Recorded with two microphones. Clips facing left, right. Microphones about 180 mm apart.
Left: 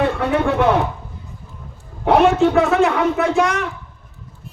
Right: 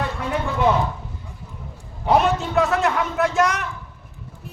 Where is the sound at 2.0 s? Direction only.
70° left (ahead or behind).